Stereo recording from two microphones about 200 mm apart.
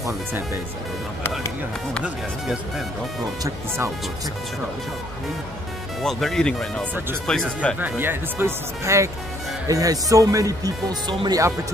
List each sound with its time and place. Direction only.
3.4 s speech: 15° right (ahead or behind)
6.0 s speech: centre (ahead or behind)
7.8 s speech: 10° right (ahead or behind)